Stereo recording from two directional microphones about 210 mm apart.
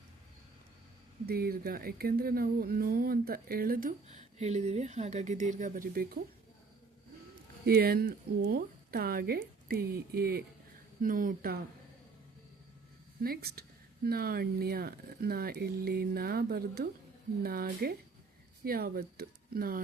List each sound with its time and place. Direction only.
1.3 s speech: 45° right (ahead or behind)
7.6 s speech: 45° right (ahead or behind)
13.2 s speech: 45° right (ahead or behind)